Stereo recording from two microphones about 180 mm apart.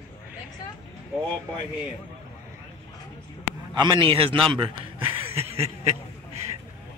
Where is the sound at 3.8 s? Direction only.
25° right (ahead or behind).